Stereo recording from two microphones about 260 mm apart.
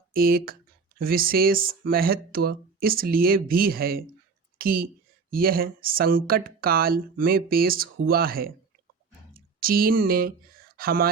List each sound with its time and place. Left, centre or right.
0.1 s speech: right